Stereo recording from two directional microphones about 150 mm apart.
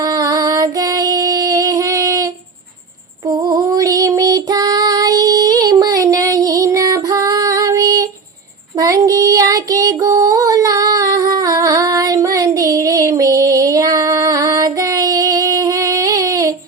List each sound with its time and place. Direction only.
0.0 s music: 25° right (ahead or behind)
3.2 s child singing: 30° right (ahead or behind)
8.8 s female singing: 25° right (ahead or behind)
11.3 s a sound: 25° right (ahead or behind)